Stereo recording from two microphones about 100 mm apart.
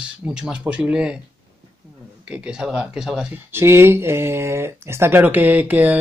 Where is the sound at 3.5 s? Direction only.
25° right (ahead or behind).